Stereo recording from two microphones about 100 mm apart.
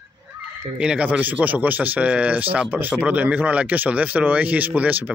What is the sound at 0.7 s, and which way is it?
Speech, 10° right (ahead or behind).